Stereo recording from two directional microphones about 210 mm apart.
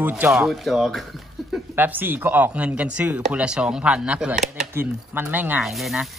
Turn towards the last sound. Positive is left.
turn(degrees=0)  # may be behind; listen again after turning